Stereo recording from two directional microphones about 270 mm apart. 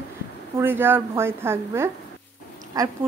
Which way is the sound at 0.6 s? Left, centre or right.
Centre.